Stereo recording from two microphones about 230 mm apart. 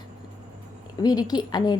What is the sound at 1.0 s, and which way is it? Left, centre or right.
Speech, centre.